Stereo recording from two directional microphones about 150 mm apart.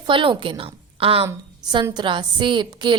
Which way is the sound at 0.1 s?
35° right (ahead or behind).